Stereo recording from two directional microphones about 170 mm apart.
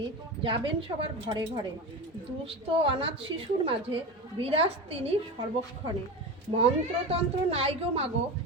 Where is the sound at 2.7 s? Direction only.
30° right (ahead or behind).